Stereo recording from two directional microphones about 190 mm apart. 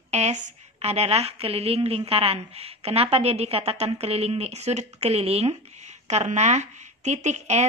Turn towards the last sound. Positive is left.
turn(degrees=-35)  # may be behind; listen again after turning